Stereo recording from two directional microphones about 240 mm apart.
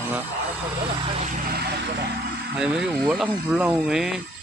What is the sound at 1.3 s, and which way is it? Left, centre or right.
Vehicle, right.